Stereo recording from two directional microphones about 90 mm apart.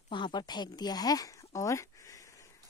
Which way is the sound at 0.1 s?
55° left (ahead or behind).